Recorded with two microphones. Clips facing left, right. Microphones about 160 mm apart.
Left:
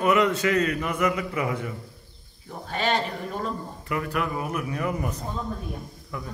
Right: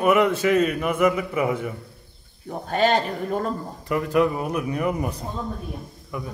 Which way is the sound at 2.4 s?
45° right (ahead or behind).